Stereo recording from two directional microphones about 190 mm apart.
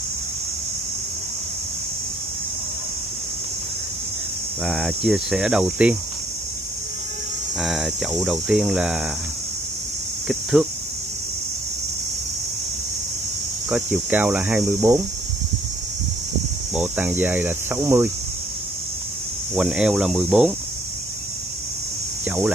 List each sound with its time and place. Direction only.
4.6 s speech: centre (ahead or behind)
7.5 s speech: centre (ahead or behind)
10.2 s speech: 5° right (ahead or behind)
13.7 s speech: 5° right (ahead or behind)
16.7 s speech: 5° right (ahead or behind)
19.5 s speech: 5° right (ahead or behind)
22.2 s cricket: 5° right (ahead or behind)